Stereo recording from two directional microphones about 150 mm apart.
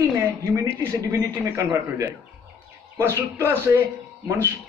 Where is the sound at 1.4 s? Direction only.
20° right (ahead or behind).